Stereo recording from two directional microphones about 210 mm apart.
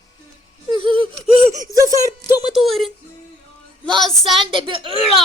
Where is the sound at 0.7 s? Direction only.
25° right (ahead or behind).